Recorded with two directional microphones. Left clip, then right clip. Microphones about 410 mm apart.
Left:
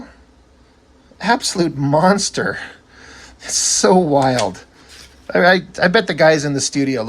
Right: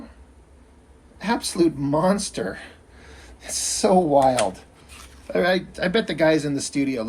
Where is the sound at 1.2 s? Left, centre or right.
Centre.